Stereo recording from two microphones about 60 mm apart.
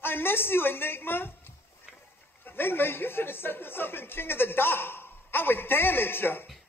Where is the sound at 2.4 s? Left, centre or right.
Left.